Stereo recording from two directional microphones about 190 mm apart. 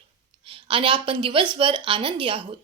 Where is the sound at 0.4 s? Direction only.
25° right (ahead or behind).